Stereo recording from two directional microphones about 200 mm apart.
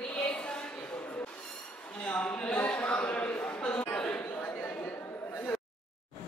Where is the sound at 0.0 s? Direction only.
5° left (ahead or behind).